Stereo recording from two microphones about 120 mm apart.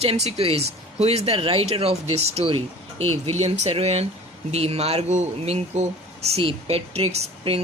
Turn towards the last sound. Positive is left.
turn(degrees=-60)  # may be behind; listen again after turning